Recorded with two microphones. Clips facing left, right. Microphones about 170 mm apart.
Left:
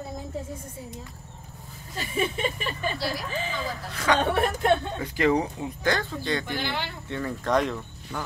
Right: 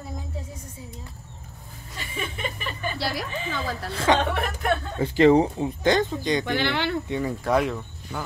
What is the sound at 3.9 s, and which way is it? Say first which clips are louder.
Speech: right 3 dB; 25° right (ahead or behind).